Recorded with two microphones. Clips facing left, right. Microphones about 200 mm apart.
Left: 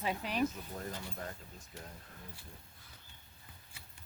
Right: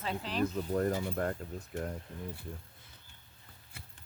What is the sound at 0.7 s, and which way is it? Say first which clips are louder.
Speech: right 12 dB; 60° right (ahead or behind).